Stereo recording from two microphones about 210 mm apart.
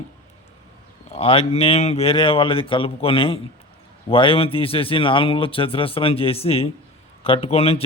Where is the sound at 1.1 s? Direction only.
25° left (ahead or behind).